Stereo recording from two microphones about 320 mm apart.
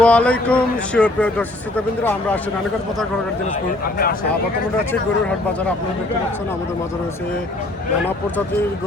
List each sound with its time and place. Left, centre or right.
0.0 s a man's voice: centre